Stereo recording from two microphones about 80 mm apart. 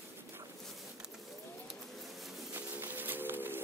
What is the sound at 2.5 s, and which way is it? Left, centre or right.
Bird, right.